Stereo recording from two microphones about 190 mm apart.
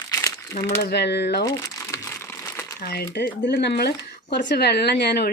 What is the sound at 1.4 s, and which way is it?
Crumpling, 15° left (ahead or behind).